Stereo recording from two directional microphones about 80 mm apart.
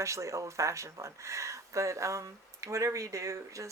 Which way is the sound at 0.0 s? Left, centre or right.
Right.